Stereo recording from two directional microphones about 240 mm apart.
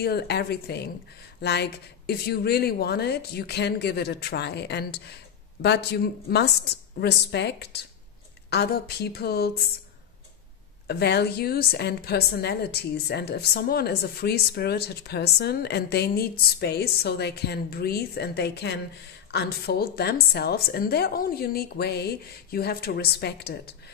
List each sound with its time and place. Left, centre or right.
0.0 s a woman's voice: left
10.9 s a woman's voice: left